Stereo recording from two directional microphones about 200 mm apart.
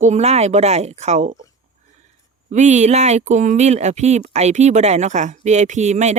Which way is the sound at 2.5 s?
35° right (ahead or behind).